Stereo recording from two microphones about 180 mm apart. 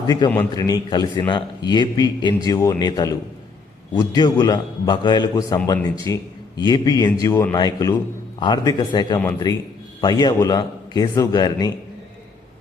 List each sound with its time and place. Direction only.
0.5 s a man's voice: 20° left (ahead or behind)